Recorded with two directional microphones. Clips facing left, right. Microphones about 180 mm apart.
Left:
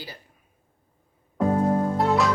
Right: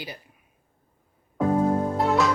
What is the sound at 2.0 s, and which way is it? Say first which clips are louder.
Music: right 1 dB; centre (ahead or behind).